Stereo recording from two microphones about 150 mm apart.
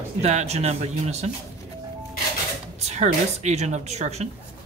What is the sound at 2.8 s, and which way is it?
A woman's voice, 50° right (ahead or behind).